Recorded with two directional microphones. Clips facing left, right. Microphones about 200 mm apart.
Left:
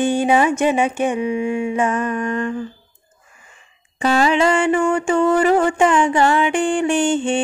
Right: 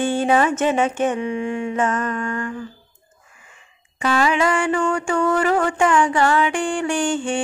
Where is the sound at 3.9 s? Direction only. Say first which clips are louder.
Left 3 dB; 30° left (ahead or behind).